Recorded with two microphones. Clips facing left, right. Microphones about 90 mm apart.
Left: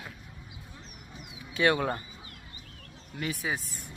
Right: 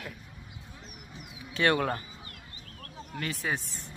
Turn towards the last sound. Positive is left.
turn(degrees=10)  # may be behind; listen again after turning